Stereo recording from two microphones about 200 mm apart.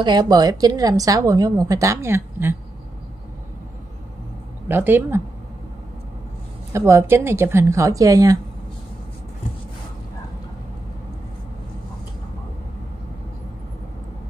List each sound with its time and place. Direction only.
0.0 s a woman's voice: 20° right (ahead or behind)
4.6 s a woman's voice: 10° right (ahead or behind)
6.7 s a woman's voice: 15° right (ahead or behind)